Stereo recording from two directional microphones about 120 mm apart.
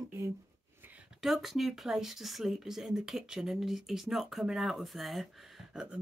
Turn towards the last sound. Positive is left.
turn(degrees=-5)  # may be behind; listen again after turning